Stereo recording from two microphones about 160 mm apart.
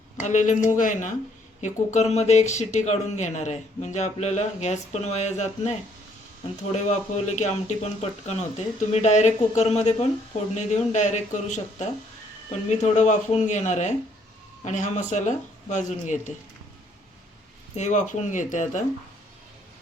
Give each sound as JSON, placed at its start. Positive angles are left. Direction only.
{"t": 0.2, "sound": "speech", "side_deg": 50}
{"t": 17.7, "sound": "speech", "side_deg": 50}